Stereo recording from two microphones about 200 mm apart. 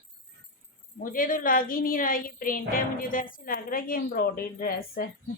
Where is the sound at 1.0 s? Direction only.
45° left (ahead or behind).